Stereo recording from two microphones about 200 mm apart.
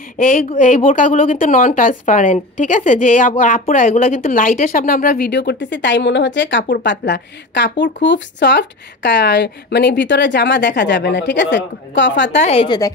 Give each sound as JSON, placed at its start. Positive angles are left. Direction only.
{"t": 0.2, "sound": "a woman's voice", "side_deg": 45}
{"t": 12.4, "sound": "a woman's voice", "side_deg": 30}